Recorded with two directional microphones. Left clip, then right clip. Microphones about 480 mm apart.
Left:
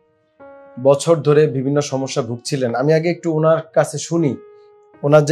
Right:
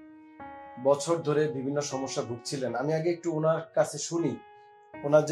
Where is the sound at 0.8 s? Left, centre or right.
Left.